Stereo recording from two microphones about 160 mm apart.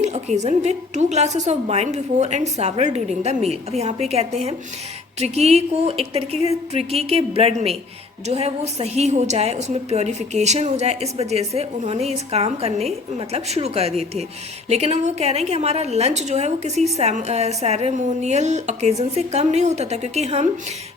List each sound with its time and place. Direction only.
0.0 s a woman's voice: 45° right (ahead or behind)